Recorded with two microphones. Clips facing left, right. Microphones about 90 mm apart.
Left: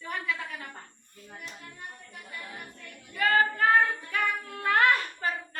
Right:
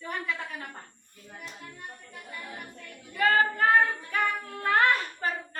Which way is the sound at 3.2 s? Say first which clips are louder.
Right 1 dB; 30° right (ahead or behind).